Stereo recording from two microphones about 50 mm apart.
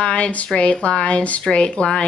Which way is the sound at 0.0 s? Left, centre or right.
Left.